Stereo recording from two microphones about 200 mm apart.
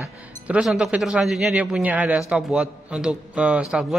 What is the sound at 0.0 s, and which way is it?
Speech, 5° right (ahead or behind).